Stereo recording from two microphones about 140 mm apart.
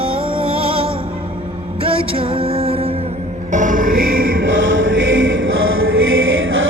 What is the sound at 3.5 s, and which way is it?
Music, 65° right (ahead or behind).